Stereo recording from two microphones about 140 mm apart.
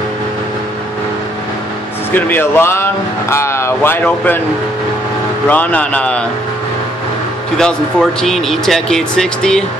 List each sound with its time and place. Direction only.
2.1 s speech: 15° left (ahead or behind)
5.5 s speech: 10° left (ahead or behind)
7.5 s speech: 5° left (ahead or behind)